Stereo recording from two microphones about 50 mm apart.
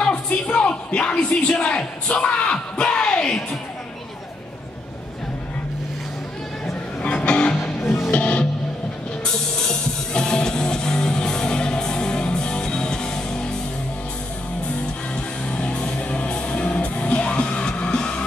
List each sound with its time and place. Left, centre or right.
0.0 s music: left
6.6 s music: left
7.6 s music: centre
8.1 s music: left
15.4 s music: left